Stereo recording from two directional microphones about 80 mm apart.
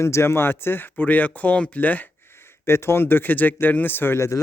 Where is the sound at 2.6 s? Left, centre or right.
Left.